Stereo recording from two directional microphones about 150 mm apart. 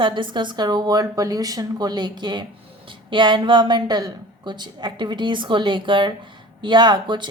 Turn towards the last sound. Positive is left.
turn(degrees=-30)  # may be behind; listen again after turning